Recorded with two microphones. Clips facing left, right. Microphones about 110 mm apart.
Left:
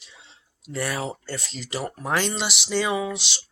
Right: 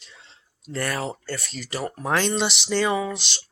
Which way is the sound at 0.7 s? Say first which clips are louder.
Right 1 dB; 10° left (ahead or behind).